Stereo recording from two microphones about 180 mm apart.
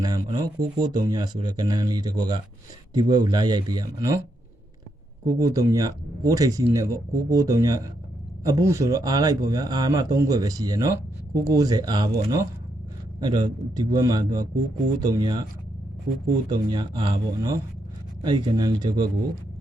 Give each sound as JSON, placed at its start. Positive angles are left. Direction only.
{"t": 0.0, "sound": "speech", "side_deg": -20}
{"t": 5.2, "sound": "speech", "side_deg": -20}
{"t": 16.5, "sound": "speech", "side_deg": -25}